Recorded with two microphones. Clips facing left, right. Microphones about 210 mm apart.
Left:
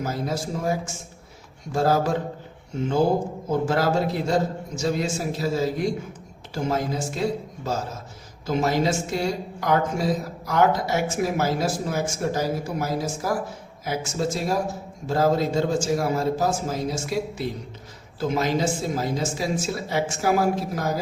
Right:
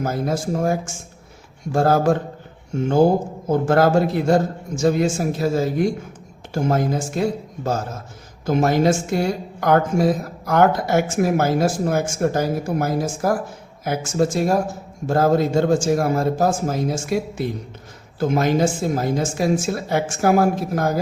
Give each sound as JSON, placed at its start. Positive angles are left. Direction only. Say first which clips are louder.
{"t": 0.0, "sound": "a woman's voice", "louder": "right 5 dB", "side_deg": -50}